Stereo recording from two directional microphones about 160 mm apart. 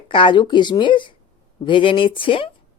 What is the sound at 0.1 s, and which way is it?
Speech, 30° left (ahead or behind).